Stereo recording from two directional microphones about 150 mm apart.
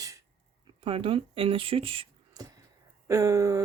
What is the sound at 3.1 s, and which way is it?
Speech, 20° right (ahead or behind).